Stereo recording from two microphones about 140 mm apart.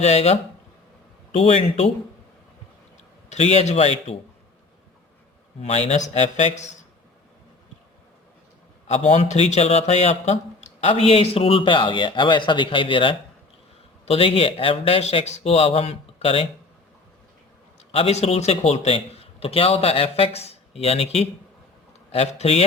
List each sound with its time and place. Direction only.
0.0 s speech: 50° left (ahead or behind)
1.4 s speech: 50° left (ahead or behind)
3.2 s speech: 50° left (ahead or behind)
5.6 s speech: 50° left (ahead or behind)
8.9 s speech: 50° left (ahead or behind)
17.9 s speech: 45° left (ahead or behind)